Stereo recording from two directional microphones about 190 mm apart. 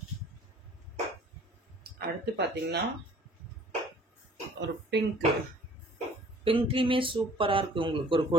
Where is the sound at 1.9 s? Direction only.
60° right (ahead or behind).